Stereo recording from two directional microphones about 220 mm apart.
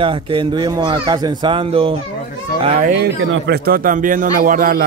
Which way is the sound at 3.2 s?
60° right (ahead or behind).